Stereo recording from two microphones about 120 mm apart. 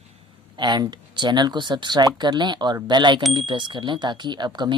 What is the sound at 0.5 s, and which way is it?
Speech, 40° right (ahead or behind).